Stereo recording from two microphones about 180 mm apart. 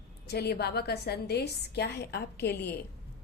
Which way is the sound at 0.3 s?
65° left (ahead or behind).